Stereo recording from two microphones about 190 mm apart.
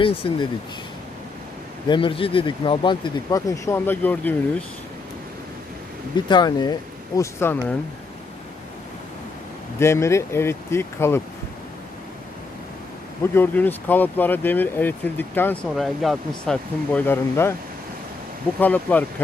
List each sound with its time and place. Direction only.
0.0 s speech: 30° left (ahead or behind)
1.9 s speech: 25° left (ahead or behind); by 4.4 s 10° left (ahead or behind)
6.1 s speech: 25° left (ahead or behind)
9.8 s speech: 15° left (ahead or behind)
13.3 s speech: 10° left (ahead or behind)
15.7 s speech: centre (ahead or behind)
18.6 s speech: 10° left (ahead or behind)